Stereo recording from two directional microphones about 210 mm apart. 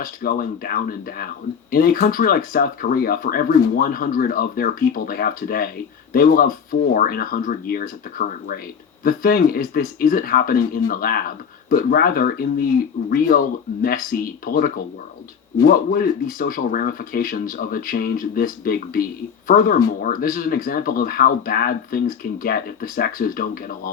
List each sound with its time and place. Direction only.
0.0 s speech: 45° left (ahead or behind)